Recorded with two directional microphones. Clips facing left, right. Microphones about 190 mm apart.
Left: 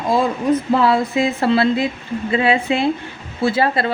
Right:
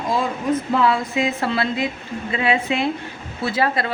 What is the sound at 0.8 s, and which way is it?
A woman's voice, 35° left (ahead or behind).